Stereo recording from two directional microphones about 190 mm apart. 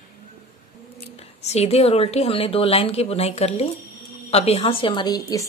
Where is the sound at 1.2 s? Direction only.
35° left (ahead or behind).